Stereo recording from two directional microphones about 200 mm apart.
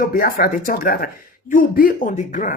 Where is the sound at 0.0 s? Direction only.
45° left (ahead or behind).